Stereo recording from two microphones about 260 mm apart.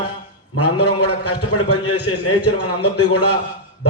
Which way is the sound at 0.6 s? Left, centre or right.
Left.